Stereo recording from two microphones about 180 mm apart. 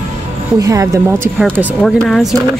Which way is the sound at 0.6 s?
20° right (ahead or behind).